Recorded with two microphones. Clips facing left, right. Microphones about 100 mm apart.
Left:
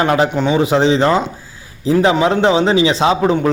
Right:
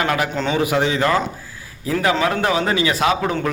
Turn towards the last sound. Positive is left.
turn(degrees=25)  # may be behind; listen again after turning